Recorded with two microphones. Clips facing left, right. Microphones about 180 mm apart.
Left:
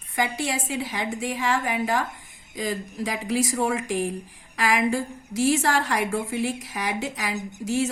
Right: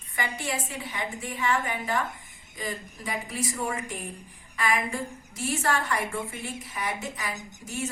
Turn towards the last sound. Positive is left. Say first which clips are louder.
# left 9 dB
turn(degrees=80)